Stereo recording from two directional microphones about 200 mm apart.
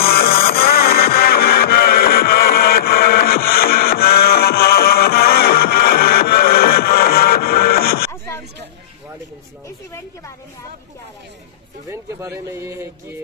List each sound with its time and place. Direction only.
0.0 s music: 50° left (ahead or behind)
11.9 s speech: 15° right (ahead or behind)